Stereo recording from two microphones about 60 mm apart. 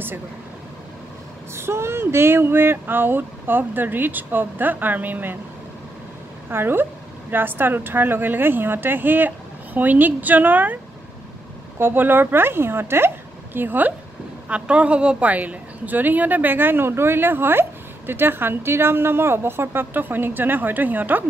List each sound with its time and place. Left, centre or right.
1.5 s a woman's voice: right
6.5 s a woman's voice: right
11.8 s a woman's voice: right
14.5 s a woman's voice: right